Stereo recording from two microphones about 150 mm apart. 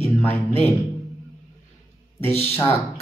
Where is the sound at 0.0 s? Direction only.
15° left (ahead or behind).